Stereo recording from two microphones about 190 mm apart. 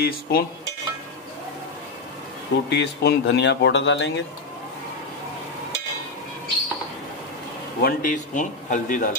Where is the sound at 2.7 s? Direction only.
65° left (ahead or behind).